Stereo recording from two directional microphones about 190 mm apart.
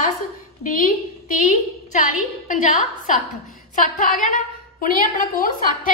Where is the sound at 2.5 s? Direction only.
45° left (ahead or behind).